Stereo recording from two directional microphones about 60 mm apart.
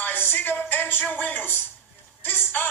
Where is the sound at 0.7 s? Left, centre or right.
Left.